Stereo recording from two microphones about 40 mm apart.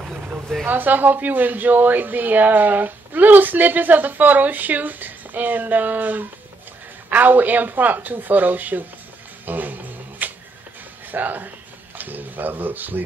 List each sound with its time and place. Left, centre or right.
0.7 s a woman's voice: right
9.5 s a sound: right
11.1 s speech: right